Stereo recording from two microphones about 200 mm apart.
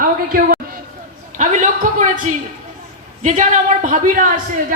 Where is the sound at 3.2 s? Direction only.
40° right (ahead or behind).